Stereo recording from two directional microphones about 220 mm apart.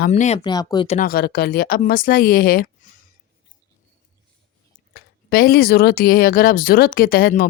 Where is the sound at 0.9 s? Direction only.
40° left (ahead or behind).